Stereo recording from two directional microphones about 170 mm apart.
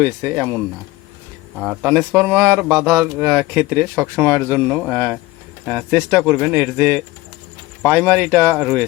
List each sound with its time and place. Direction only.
0.0 s speech: 5° right (ahead or behind)